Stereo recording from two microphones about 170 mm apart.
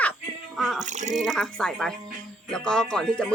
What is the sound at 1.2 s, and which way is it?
Speech, centre (ahead or behind).